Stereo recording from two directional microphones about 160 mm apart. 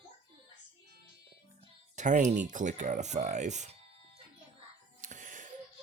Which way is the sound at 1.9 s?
50° right (ahead or behind).